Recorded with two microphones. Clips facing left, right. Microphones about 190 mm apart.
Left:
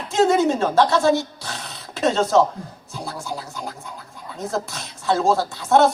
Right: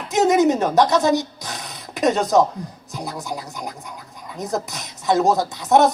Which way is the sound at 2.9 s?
15° right (ahead or behind).